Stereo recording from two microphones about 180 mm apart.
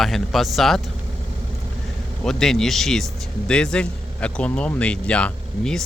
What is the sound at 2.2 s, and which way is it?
Speech, centre (ahead or behind).